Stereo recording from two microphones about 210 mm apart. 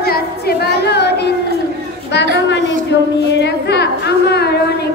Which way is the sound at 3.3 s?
55° left (ahead or behind).